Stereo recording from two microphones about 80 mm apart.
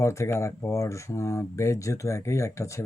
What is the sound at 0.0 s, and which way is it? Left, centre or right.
Speech, left.